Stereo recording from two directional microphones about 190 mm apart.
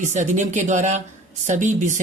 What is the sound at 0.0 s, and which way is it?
Speech, 40° right (ahead or behind).